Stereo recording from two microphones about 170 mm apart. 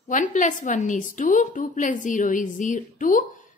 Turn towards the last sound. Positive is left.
turn(degrees=50)  # may be behind; listen again after turning